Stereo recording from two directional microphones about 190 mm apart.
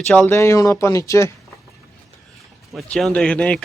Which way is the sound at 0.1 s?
10° left (ahead or behind).